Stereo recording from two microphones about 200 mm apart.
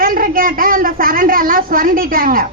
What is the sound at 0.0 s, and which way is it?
A woman's voice, 45° right (ahead or behind).